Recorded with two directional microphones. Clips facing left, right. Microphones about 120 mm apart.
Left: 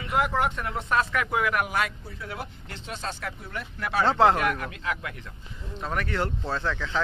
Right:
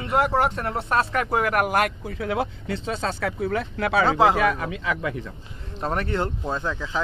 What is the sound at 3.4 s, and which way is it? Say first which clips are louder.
Speech: right 12 dB; 90° right.